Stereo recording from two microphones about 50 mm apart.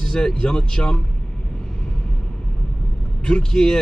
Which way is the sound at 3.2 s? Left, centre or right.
Centre.